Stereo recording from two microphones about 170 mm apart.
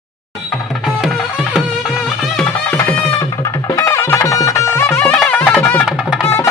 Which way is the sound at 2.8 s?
20° left (ahead or behind).